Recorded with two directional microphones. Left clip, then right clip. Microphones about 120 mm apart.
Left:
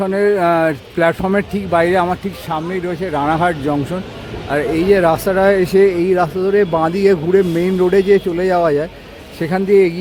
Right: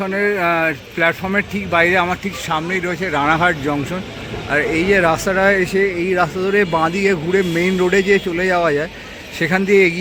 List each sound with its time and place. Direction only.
0.0 s speech: 35° left (ahead or behind)
2.7 s speech: 25° left (ahead or behind)
4.4 s speech: 35° left (ahead or behind)
6.4 s speech: 30° left (ahead or behind)
6.7 s speech: 15° left (ahead or behind)
6.9 s speech: 40° left (ahead or behind)
7.3 s speech: 25° left (ahead or behind)